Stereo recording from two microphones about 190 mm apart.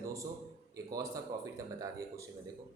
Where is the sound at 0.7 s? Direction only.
20° right (ahead or behind).